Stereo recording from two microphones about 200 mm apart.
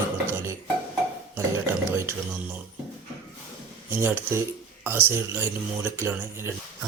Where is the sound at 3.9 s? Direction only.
10° right (ahead or behind).